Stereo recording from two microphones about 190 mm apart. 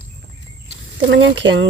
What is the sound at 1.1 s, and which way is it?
Speech, 75° right (ahead or behind).